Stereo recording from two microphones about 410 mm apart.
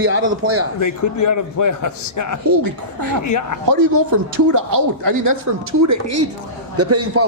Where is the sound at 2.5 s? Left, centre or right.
Right.